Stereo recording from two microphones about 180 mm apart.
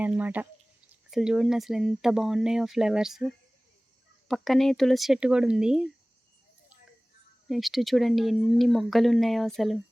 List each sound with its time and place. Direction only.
0.0 s speech: 10° right (ahead or behind)
7.4 s speech: centre (ahead or behind)